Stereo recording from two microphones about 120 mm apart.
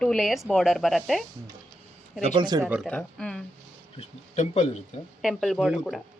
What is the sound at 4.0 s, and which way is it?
Speech, 70° left (ahead or behind).